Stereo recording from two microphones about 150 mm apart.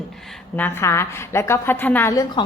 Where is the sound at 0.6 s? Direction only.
15° left (ahead or behind).